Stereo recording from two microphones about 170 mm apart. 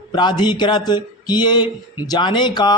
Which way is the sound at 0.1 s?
25° left (ahead or behind).